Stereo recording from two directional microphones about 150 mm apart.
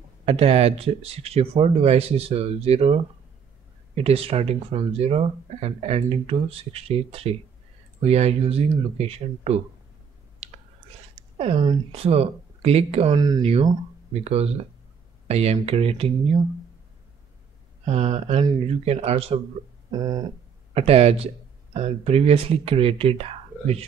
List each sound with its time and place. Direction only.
0.2 s speech: 40° right (ahead or behind)
10.4 s whispering: 40° right (ahead or behind)
11.3 s speech: 35° right (ahead or behind)
13.1 s a sound: 25° right (ahead or behind)
13.4 s speech: 40° right (ahead or behind)
17.8 s speech: 45° right (ahead or behind)
19.9 s a sound: 25° right (ahead or behind)
20.7 s speech: 45° right (ahead or behind)